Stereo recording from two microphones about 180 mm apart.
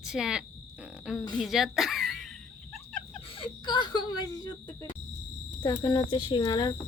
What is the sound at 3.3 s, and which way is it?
Speech, 30° left (ahead or behind).